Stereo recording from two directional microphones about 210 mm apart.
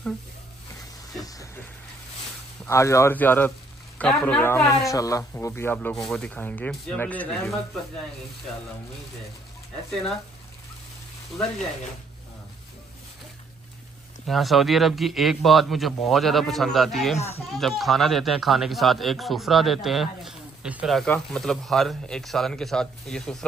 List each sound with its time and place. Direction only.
1.2 s vehicle: 15° left (ahead or behind)
2.6 s speech: 15° left (ahead or behind)
14.2 s speech: centre (ahead or behind)